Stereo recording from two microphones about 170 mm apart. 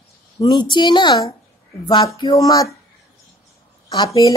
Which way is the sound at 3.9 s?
25° left (ahead or behind).